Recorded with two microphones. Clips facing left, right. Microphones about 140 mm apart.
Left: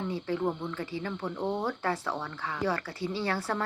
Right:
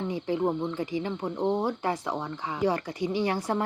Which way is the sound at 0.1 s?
15° right (ahead or behind).